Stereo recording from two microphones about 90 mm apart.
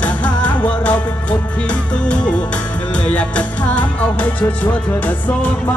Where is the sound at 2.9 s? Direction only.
15° left (ahead or behind).